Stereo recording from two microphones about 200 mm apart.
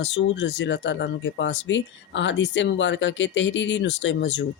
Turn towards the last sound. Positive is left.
turn(degrees=65)  # may be behind; listen again after turning